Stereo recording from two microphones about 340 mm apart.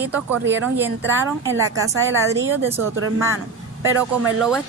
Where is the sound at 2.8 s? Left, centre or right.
Right.